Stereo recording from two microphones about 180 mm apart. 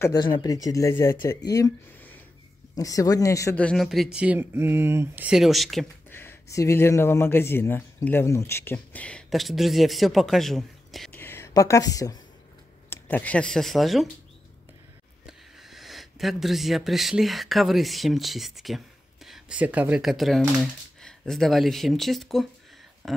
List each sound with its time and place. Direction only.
0.0 s speech: 20° left (ahead or behind)
3.6 s speech: centre (ahead or behind)
6.0 s speech: 15° left (ahead or behind)
11.1 s speech: 15° left (ahead or behind)
12.9 s speech: 10° left (ahead or behind)
15.2 s speech: centre (ahead or behind)